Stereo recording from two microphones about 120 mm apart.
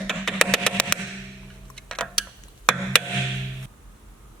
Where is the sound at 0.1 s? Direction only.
5° left (ahead or behind).